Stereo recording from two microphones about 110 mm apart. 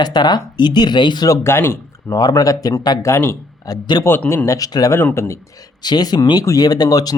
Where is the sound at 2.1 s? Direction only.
35° left (ahead or behind).